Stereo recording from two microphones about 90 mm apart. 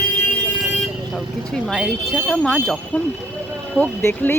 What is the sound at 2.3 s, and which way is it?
Speech, 10° left (ahead or behind).